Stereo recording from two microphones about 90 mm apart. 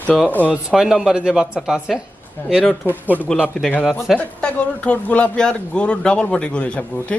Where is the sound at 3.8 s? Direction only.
5° right (ahead or behind).